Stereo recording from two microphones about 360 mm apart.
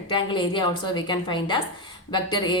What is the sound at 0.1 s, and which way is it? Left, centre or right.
A woman's voice, centre.